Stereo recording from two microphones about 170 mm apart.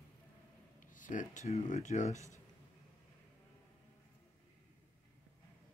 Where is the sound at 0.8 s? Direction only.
50° left (ahead or behind).